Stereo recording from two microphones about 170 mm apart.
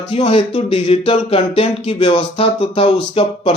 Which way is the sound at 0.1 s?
35° left (ahead or behind).